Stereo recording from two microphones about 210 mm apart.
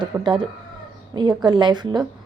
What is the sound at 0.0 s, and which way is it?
A woman's voice, 20° right (ahead or behind).